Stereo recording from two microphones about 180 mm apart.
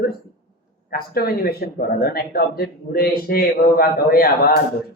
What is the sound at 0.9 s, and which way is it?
Speech, 55° left (ahead or behind).